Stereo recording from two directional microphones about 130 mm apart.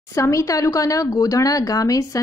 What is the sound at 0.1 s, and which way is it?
A woman's voice, 25° left (ahead or behind).